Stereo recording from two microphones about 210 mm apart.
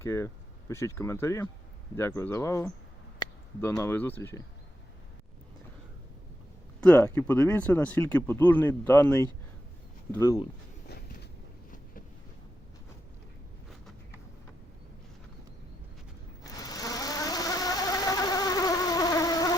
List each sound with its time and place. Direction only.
0.0 s speech: 15° left (ahead or behind)
6.8 s speech: 10° left (ahead or behind)
10.8 s a sound: 50° left (ahead or behind)
16.6 s insect: 15° left (ahead or behind)